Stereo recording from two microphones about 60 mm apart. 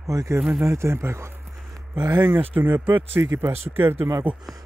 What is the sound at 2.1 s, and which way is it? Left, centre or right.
Speech, right.